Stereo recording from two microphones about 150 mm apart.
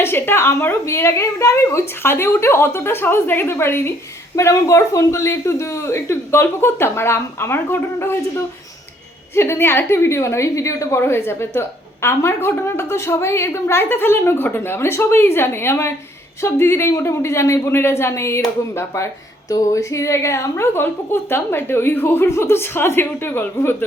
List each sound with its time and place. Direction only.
0.0 s a man's voice: 15° left (ahead or behind)